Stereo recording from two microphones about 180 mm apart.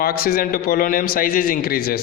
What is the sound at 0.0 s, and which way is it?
A man's voice, 55° left (ahead or behind).